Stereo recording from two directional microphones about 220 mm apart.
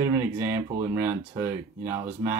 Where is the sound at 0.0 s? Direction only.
10° right (ahead or behind).